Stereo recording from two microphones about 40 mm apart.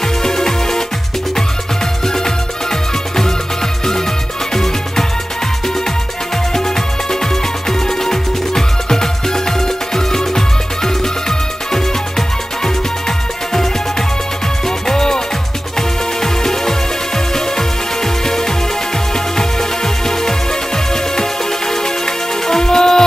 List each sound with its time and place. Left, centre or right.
0.2 s music: centre
2.0 s music: centre
4.5 s music: centre
6.5 s music: centre
14.8 s music: centre
16.2 s music: centre